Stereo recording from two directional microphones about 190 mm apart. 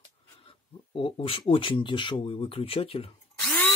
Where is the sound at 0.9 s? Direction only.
30° left (ahead or behind).